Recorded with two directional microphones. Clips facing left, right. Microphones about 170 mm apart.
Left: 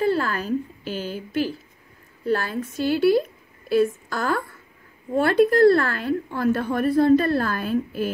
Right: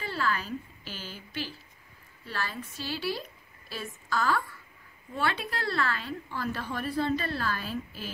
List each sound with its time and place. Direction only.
0.0 s a woman's voice: 45° left (ahead or behind)